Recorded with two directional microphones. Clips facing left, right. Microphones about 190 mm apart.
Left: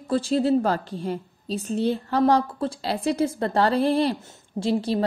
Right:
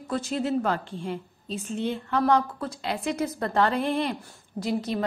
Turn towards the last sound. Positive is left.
turn(degrees=30)  # may be behind; listen again after turning